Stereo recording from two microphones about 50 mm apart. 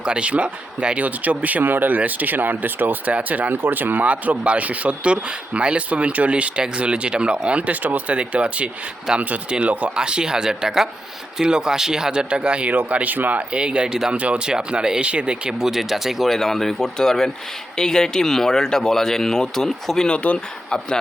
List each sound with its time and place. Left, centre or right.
0.0 s speech: right
4.1 s speech: right
9.1 s speech: centre
12.7 s speech: right
13.5 s speech: right; by 20.1 s centre
20.1 s speech: left